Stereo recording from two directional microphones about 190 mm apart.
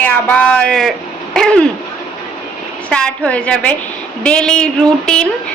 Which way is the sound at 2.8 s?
5° left (ahead or behind).